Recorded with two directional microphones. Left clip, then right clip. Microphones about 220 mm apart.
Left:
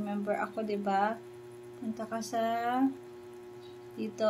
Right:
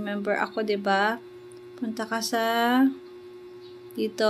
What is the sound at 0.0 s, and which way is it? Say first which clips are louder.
Speech: right 6 dB; 30° right (ahead or behind).